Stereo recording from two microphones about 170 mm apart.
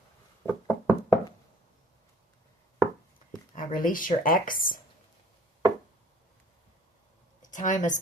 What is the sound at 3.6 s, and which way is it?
Speech, 55° left (ahead or behind).